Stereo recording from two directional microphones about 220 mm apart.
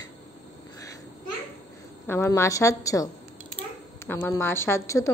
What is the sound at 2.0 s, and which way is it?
A woman's voice, 10° left (ahead or behind).